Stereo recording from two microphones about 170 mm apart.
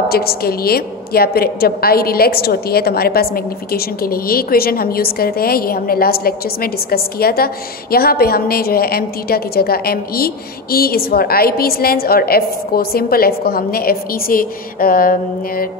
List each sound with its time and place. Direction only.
0.1 s a woman's voice: 65° left (ahead or behind)